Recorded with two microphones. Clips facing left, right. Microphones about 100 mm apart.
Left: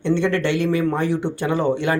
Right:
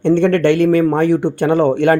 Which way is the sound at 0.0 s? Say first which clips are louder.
Right 7 dB; 55° right (ahead or behind).